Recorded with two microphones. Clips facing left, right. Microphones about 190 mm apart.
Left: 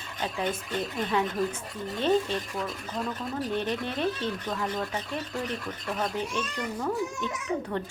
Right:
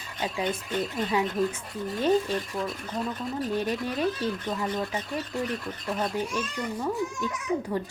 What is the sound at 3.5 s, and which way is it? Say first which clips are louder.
Speech: right 2 dB; 10° right (ahead or behind).